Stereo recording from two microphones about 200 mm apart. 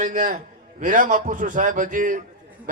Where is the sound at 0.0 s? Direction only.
40° right (ahead or behind).